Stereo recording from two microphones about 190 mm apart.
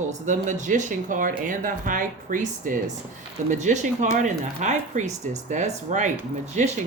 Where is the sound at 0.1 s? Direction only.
40° right (ahead or behind).